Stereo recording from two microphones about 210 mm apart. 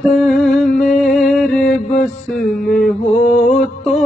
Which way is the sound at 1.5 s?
40° left (ahead or behind).